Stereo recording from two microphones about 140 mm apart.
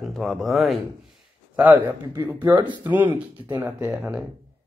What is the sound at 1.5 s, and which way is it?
Speech, 10° right (ahead or behind).